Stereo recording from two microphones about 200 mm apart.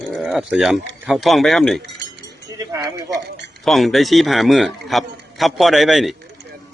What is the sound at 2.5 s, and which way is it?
Speech, 15° right (ahead or behind).